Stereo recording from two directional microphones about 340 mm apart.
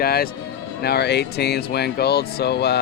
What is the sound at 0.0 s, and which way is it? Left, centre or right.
Speech, left.